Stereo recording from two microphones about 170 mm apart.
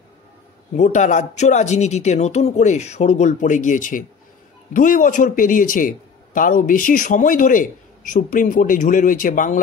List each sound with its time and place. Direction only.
0.7 s a man's voice: 45° left (ahead or behind)